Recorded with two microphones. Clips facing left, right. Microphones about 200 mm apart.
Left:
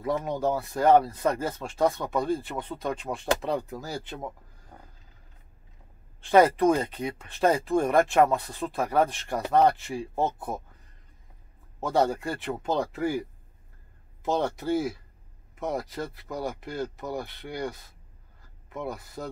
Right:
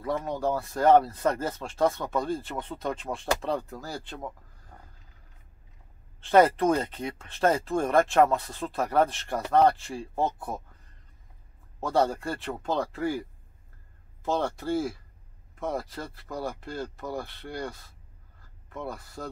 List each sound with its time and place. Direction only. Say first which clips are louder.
0.0 s speech: left 2 dB; 15° left (ahead or behind)
6.2 s speech: left 1 dB; 10° left (ahead or behind)
11.8 s speech: left 1 dB; 15° left (ahead or behind)
14.2 s speech: left 1 dB; 15° left (ahead or behind)